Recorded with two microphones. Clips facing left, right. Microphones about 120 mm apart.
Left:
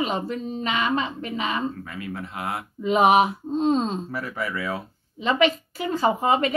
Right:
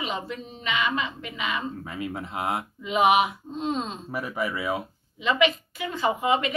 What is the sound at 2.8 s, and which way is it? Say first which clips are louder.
A woman's voice: left 3 dB; 40° left (ahead or behind).